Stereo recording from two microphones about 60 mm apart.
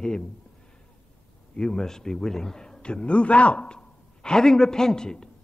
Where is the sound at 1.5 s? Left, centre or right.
Centre.